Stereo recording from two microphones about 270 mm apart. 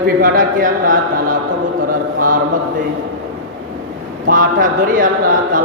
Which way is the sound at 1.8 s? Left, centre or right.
Right.